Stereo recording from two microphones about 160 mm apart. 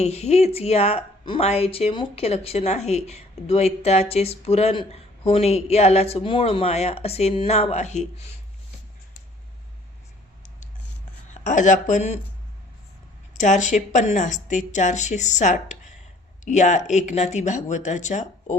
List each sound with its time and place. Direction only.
0.0 s speech: 40° left (ahead or behind)
11.4 s a woman's voice: 50° left (ahead or behind)
13.3 s a woman's voice: 50° left (ahead or behind)